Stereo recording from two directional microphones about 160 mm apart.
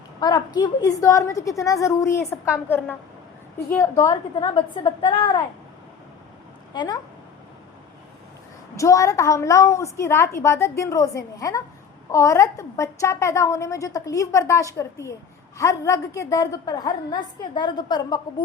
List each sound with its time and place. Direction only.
0.2 s a woman's voice: 25° left (ahead or behind)
6.7 s a woman's voice: 25° left (ahead or behind)
8.7 s a woman's voice: 20° left (ahead or behind)